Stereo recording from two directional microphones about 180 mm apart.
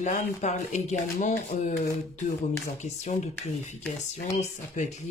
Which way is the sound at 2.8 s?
40° left (ahead or behind).